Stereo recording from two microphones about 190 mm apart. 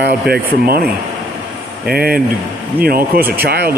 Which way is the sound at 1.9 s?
55° right (ahead or behind).